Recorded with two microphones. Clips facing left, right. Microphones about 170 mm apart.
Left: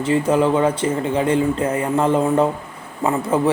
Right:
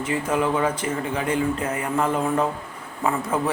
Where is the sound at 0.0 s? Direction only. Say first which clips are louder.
Left 6 dB; 30° left (ahead or behind).